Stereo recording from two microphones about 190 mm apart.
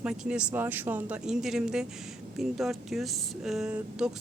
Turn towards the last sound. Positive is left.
turn(degrees=-5)  # may be behind; listen again after turning